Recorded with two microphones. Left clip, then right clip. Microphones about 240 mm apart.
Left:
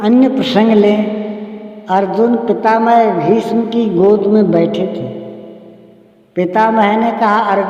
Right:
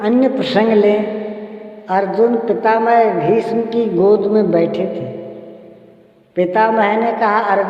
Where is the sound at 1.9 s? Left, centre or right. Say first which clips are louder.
Left 2 dB; left.